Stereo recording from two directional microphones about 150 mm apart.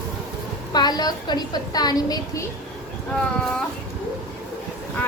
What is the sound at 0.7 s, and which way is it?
A woman's voice, 25° left (ahead or behind).